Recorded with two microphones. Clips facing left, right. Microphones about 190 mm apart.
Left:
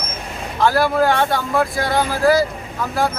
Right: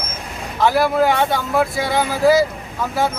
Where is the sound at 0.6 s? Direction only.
Centre (ahead or behind).